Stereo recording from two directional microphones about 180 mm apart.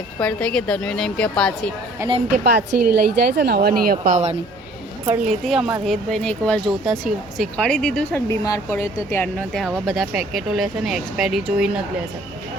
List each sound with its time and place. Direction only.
0.2 s speech: 5° left (ahead or behind)
2.0 s a woman's voice: 15° right (ahead or behind)
2.4 s a woman's voice: 65° right (ahead or behind)
5.0 s a woman's voice: 10° right (ahead or behind)
8.3 s speech: 15° left (ahead or behind); by 11.8 s 5° right (ahead or behind)